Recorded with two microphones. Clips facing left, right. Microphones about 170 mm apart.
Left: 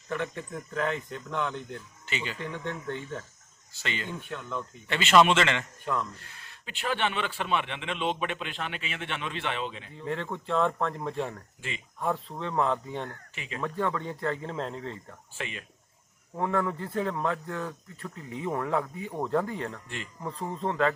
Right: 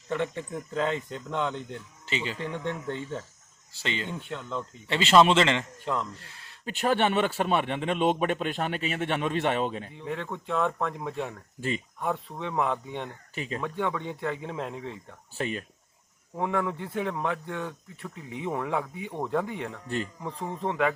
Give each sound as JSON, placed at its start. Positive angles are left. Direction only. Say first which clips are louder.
{"t": 0.1, "sound": "speech", "louder": "right 3 dB", "side_deg": -25}
{"t": 6.7, "sound": "a man's voice", "louder": "right 5 dB", "side_deg": -45}
{"t": 10.0, "sound": "speech", "louder": "left 3 dB", "side_deg": -5}
{"t": 12.4, "sound": "speech", "louder": "left 1 dB", "side_deg": -10}
{"t": 13.3, "sound": "speech", "louder": "right 6 dB", "side_deg": -40}
{"t": 13.6, "sound": "speech", "louder": "left 2 dB", "side_deg": 0}
{"t": 15.4, "sound": "speech", "louder": "right 7 dB", "side_deg": -40}
{"t": 16.4, "sound": "speech", "louder": "even", "side_deg": -10}